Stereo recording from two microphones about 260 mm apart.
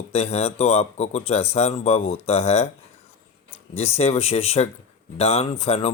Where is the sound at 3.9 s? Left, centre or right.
Left.